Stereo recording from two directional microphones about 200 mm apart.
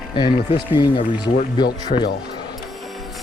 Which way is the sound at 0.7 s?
25° left (ahead or behind).